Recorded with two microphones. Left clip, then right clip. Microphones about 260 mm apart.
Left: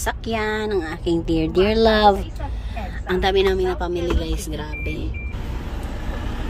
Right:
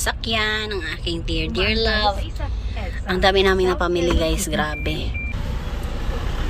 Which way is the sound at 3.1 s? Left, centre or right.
Centre.